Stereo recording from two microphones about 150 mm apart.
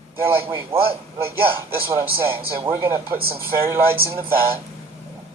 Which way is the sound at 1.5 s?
15° right (ahead or behind).